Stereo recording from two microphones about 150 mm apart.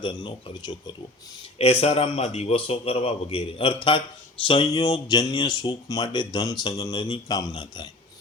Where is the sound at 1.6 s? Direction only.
40° left (ahead or behind).